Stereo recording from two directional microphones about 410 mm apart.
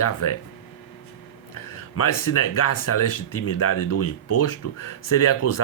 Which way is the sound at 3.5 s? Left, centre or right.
Left.